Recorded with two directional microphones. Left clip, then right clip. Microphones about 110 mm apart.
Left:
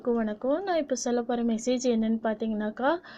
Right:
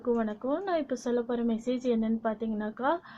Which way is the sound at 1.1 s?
25° left (ahead or behind).